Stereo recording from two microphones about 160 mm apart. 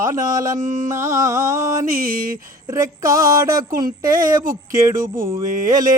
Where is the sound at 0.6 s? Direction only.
55° right (ahead or behind).